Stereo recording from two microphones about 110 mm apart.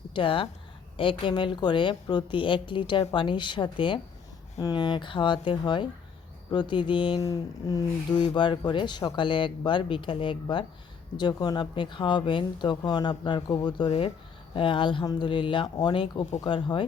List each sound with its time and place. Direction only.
0.1 s speech: 50° left (ahead or behind)
4.5 s speech: 40° left (ahead or behind)
7.2 s a sound: 35° left (ahead or behind)
8.4 s speech: 45° left (ahead or behind)